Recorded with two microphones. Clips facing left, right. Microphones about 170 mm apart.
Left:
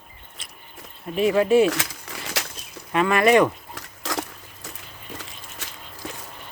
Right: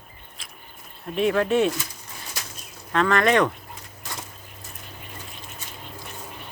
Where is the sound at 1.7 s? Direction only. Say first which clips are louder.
Left 3 dB; 90° left.